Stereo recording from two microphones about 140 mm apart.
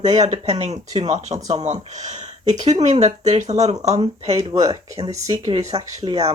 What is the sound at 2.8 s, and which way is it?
Speech, 55° right (ahead or behind).